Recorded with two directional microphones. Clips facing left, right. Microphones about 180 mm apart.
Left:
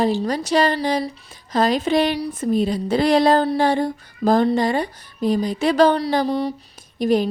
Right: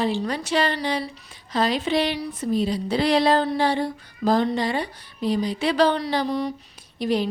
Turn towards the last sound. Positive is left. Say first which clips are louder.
# left 5 dB
turn(degrees=45)  # may be behind; listen again after turning